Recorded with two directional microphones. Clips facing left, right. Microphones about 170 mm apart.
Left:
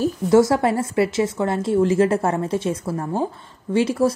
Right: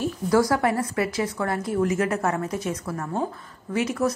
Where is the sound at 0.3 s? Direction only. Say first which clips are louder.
Left 5 dB; 25° left (ahead or behind).